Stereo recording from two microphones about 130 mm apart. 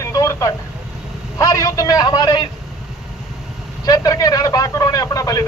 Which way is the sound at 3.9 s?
25° left (ahead or behind).